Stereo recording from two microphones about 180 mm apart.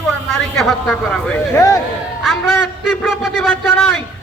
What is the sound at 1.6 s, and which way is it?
Speech, 15° left (ahead or behind).